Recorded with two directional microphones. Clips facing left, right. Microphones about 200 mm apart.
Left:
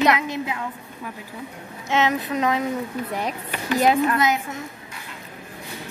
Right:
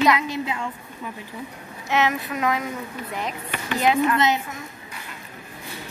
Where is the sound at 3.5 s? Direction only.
40° left (ahead or behind).